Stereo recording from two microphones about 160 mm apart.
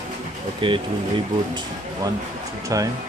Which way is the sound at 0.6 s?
30° right (ahead or behind).